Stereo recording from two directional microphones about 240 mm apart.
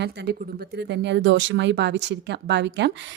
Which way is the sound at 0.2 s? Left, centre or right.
Right.